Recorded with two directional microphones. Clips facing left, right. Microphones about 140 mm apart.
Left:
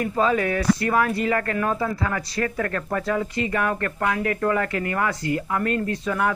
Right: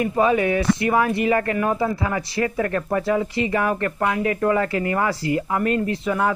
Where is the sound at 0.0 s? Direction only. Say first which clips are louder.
Right 3 dB; 20° right (ahead or behind).